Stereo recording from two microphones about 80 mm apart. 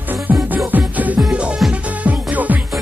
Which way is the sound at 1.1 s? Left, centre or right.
Centre.